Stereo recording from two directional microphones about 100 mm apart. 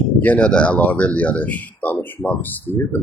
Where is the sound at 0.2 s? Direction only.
10° left (ahead or behind).